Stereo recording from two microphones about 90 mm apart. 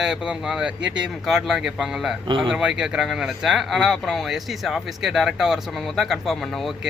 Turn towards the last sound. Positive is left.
turn(degrees=0)  # may be behind; listen again after turning